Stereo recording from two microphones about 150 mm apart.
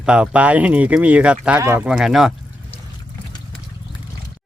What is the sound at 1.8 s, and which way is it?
Speech, 5° right (ahead or behind).